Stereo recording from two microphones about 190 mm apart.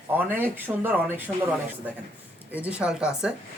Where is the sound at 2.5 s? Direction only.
5° right (ahead or behind).